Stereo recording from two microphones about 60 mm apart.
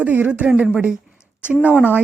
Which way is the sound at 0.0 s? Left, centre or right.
Right.